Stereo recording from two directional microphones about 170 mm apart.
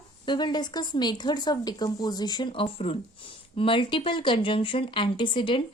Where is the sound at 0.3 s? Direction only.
25° left (ahead or behind).